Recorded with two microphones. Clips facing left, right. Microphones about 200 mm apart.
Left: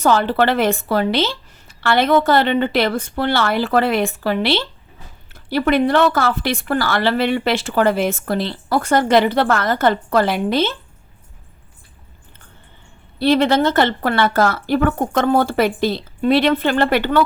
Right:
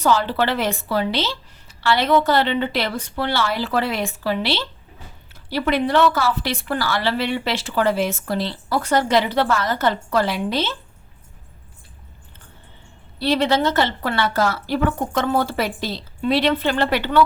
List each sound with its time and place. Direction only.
0.0 s a woman's voice: 55° left (ahead or behind)
13.1 s a woman's voice: 55° left (ahead or behind)